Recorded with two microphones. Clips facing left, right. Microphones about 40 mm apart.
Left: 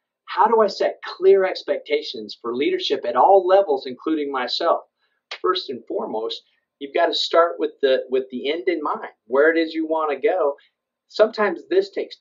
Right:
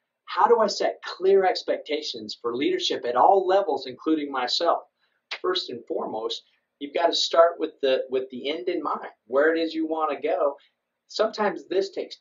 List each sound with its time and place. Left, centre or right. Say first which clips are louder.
0.2 s speech: left 3 dB; centre